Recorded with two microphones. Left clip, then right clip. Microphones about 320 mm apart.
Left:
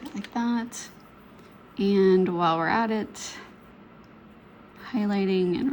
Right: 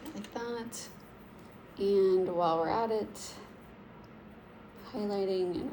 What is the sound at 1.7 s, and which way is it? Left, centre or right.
Speech, left.